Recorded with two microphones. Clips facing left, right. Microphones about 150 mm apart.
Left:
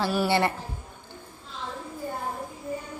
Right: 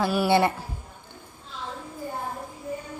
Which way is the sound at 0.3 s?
15° right (ahead or behind).